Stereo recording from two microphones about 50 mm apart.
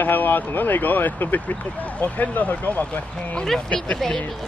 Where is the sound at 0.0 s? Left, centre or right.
Left.